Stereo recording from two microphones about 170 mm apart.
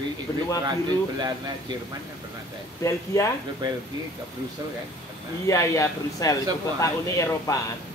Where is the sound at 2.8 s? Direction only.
20° left (ahead or behind).